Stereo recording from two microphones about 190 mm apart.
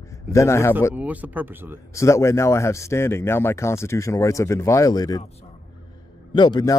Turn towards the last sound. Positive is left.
turn(degrees=20)  # may be behind; listen again after turning